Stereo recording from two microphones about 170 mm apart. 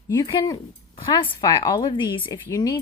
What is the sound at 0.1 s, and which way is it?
Speech, 20° left (ahead or behind).